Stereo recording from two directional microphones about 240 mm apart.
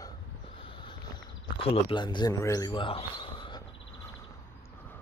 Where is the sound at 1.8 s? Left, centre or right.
Centre.